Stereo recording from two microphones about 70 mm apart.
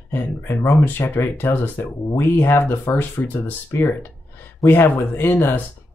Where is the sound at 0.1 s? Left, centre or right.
Left.